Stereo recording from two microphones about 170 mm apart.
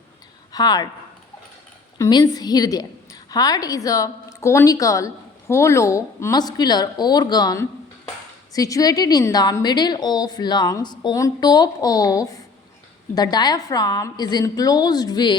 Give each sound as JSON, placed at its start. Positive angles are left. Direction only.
{"t": 0.5, "sound": "a woman's voice", "side_deg": 20}
{"t": 2.0, "sound": "a woman's voice", "side_deg": 20}